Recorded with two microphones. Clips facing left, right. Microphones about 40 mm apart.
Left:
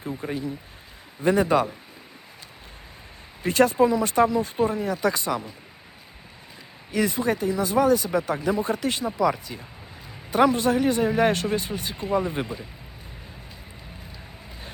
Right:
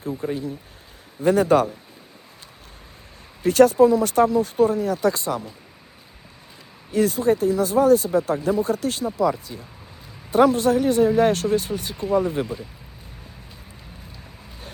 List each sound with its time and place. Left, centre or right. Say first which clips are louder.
0.2 s speech: right 3 dB; left
3.4 s speech: right 5 dB; left
6.9 s speech: right 4 dB; left